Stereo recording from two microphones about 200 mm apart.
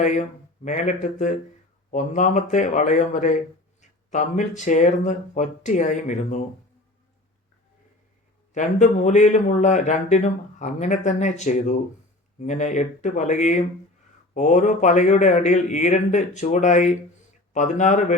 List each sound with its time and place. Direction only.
0.6 s speech: 40° left (ahead or behind)
8.5 s speech: 35° left (ahead or behind)